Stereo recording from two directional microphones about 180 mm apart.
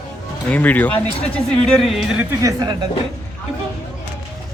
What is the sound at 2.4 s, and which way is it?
Speech, 20° right (ahead or behind).